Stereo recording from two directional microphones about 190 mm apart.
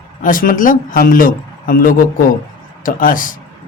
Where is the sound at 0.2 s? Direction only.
45° left (ahead or behind).